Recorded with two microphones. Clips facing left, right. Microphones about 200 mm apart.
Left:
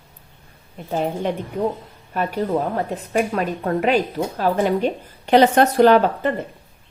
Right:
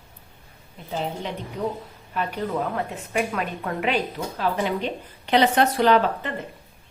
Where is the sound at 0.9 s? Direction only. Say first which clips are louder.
Left 7 dB; 50° left (ahead or behind).